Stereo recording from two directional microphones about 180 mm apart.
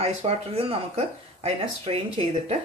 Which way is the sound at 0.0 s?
35° right (ahead or behind).